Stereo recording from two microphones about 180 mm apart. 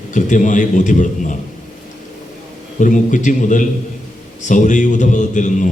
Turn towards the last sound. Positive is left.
turn(degrees=45)  # may be behind; listen again after turning